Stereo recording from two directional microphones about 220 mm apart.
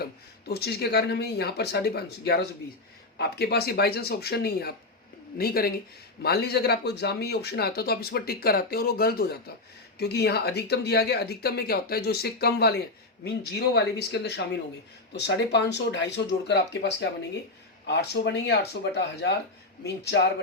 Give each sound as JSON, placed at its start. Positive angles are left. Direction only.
{"t": 0.0, "sound": "speech", "side_deg": 45}